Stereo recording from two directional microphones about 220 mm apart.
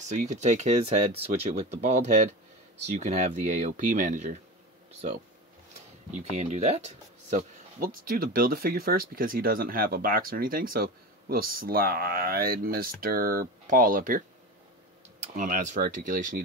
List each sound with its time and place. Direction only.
0.1 s speech: 35° right (ahead or behind)
6.3 s speech: 30° right (ahead or behind)
15.3 s speech: 35° right (ahead or behind)